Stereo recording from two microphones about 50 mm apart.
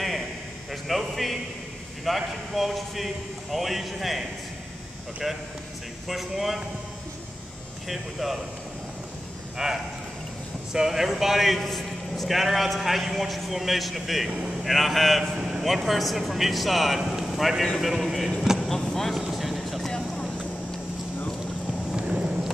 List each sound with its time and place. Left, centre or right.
0.8 s a sound: centre
2.0 s a man's voice: centre
7.9 s a man's voice: centre
9.6 s a man's voice: centre
15.3 s a sound: centre
15.6 s a man's voice: centre
19.2 s vehicle: centre
19.9 s vehicle: centre
22.0 s a sound: right